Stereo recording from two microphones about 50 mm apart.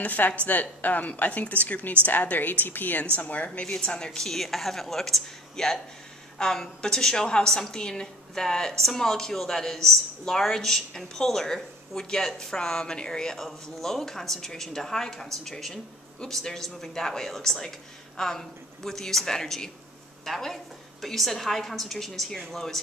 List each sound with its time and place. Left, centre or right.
0.0 s a woman's voice: left; by 22.8 s centre